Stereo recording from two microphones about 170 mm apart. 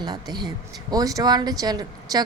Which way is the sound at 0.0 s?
25° right (ahead or behind).